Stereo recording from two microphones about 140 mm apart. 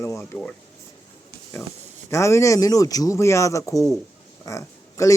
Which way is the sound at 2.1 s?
20° left (ahead or behind).